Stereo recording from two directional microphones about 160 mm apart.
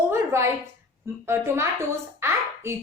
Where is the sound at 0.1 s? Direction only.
15° right (ahead or behind).